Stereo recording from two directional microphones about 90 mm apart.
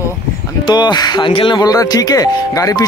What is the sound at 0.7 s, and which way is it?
Speech, 55° left (ahead or behind).